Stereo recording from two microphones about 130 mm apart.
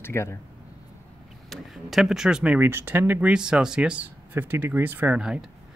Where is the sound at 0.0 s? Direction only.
20° left (ahead or behind).